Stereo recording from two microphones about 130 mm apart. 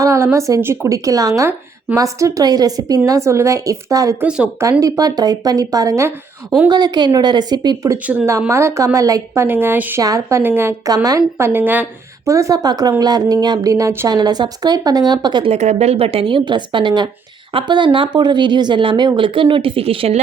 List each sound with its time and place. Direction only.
0.0 s a woman's voice: 25° right (ahead or behind)
4.2 s speech: 10° right (ahead or behind)
4.8 s a woman's voice: 30° right (ahead or behind)
8.0 s speech: 10° right (ahead or behind)
8.3 s a woman's voice: 20° right (ahead or behind)
10.0 s a woman's voice: 25° right (ahead or behind)
15.5 s speech: 60° right (ahead or behind)